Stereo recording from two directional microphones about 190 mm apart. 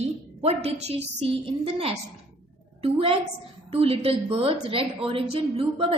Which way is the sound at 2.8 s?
30° right (ahead or behind).